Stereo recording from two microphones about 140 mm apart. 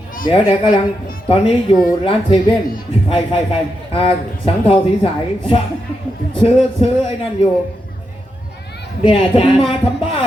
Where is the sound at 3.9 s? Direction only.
40° left (ahead or behind).